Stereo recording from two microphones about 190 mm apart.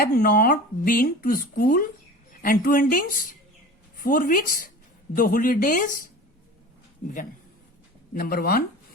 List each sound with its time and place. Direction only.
0.0 s speech: 50° left (ahead or behind)
8.1 s speech: 50° left (ahead or behind)